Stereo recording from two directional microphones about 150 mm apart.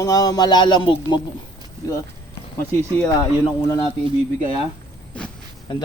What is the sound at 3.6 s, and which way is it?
Speech, 25° left (ahead or behind).